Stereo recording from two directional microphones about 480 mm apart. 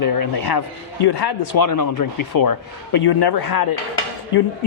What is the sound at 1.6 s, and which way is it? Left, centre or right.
A man's voice, left.